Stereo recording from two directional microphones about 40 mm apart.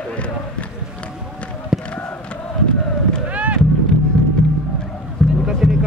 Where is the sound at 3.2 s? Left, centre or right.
Right.